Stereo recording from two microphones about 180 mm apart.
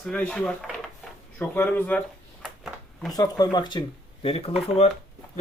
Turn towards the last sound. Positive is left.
turn(degrees=35)  # may be behind; listen again after turning